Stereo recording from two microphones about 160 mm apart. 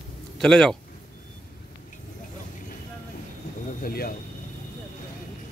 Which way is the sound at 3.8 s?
70° left (ahead or behind).